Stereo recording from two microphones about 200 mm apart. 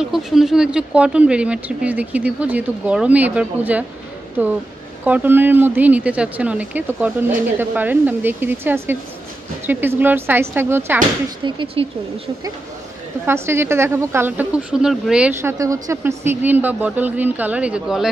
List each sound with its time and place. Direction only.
0.0 s speech: centre (ahead or behind)
11.4 s speech: 30° right (ahead or behind)
13.2 s speech: 10° right (ahead or behind)